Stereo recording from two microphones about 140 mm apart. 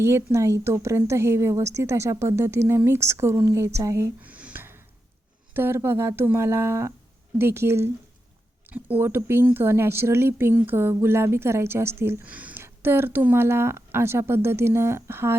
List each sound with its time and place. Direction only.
0.0 s a woman's voice: 20° right (ahead or behind)